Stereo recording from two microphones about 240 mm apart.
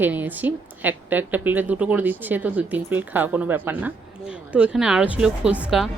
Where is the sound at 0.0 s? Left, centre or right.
Centre.